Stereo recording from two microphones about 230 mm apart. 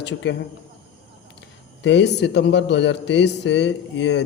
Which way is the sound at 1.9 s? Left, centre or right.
Left.